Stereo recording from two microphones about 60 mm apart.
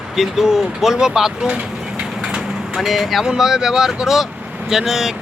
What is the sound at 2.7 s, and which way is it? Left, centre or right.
Speech, centre.